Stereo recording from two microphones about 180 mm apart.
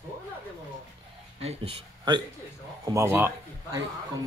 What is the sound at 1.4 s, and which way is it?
Speech, 30° right (ahead or behind).